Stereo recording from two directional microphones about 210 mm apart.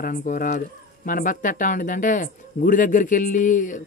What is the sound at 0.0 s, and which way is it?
Speech, 40° left (ahead or behind).